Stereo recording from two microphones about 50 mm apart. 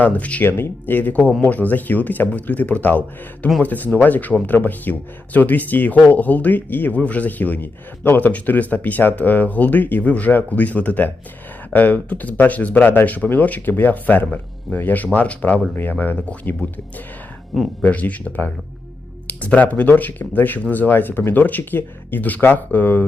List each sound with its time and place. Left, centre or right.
0.0 s speech: left
0.4 s speech: left
17.8 s speech: left